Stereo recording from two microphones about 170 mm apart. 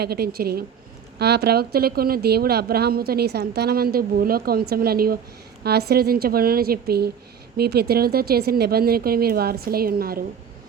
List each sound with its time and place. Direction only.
0.0 s speech: 65° right (ahead or behind)